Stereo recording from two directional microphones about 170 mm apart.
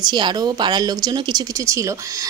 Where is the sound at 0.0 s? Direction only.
25° right (ahead or behind).